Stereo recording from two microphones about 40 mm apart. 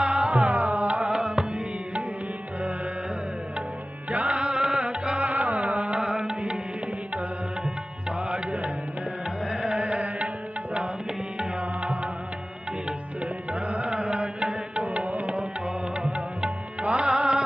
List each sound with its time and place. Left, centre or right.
0.0 s music: right
1.1 s music: right
4.1 s music: right
4.4 s music: right
6.0 s music: right
8.3 s music: right
9.5 s music: right
11.3 s music: right
13.5 s music: right
17.1 s music: right